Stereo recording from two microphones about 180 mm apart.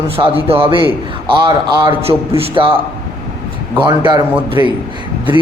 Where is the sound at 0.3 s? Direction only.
30° right (ahead or behind).